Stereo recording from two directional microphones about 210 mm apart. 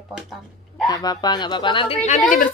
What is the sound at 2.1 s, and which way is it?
Speech, 40° left (ahead or behind).